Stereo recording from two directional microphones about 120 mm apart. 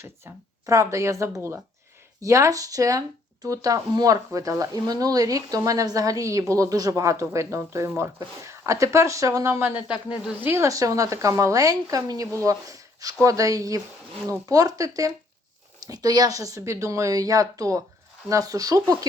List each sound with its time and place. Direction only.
0.3 s speech: 20° right (ahead or behind)
10.1 s speech: 10° right (ahead or behind)
10.5 s speech: 25° right (ahead or behind)